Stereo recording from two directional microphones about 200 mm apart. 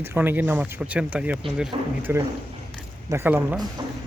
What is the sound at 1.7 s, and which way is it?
Speech, 25° right (ahead or behind).